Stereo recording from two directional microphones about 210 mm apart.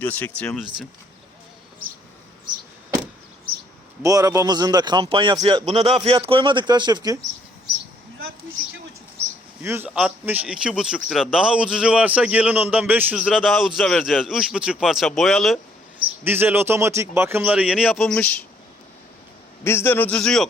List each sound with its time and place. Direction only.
0.0 s a man's voice: 10° left (ahead or behind)
4.0 s a man's voice: 15° right (ahead or behind)
9.6 s a man's voice: 10° right (ahead or behind)
16.2 s speech: 10° right (ahead or behind); by 18.3 s 5° left (ahead or behind)
19.6 s a man's voice: 10° left (ahead or behind)